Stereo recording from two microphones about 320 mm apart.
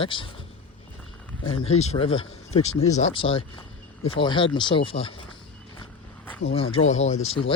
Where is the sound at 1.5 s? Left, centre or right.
Centre.